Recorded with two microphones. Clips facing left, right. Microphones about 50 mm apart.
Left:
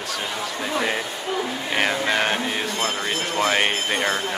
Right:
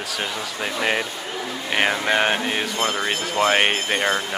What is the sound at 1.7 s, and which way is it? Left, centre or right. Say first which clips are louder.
Speech: right 2 dB; centre.